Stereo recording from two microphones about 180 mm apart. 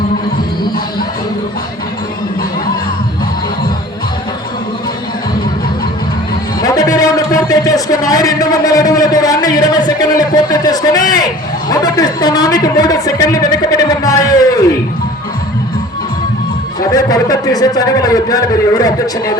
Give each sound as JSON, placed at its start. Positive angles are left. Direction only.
{"t": 6.6, "sound": "music", "side_deg": 20}
{"t": 11.7, "sound": "a man's voice", "side_deg": 20}
{"t": 16.9, "sound": "a man's voice", "side_deg": 20}